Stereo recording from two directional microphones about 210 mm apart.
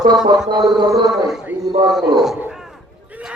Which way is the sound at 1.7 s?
20° right (ahead or behind).